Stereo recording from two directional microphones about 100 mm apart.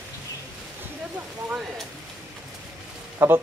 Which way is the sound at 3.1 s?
25° right (ahead or behind).